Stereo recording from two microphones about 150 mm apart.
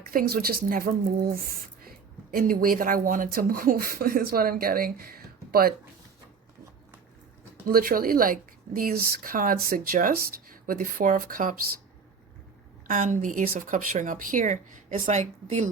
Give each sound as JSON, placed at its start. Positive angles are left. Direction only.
{"t": 0.1, "sound": "speech", "side_deg": -70}
{"t": 7.7, "sound": "speech", "side_deg": -75}
{"t": 12.9, "sound": "speech", "side_deg": -60}